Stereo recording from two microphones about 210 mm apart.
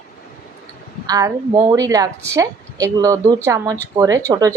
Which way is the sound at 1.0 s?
15° right (ahead or behind).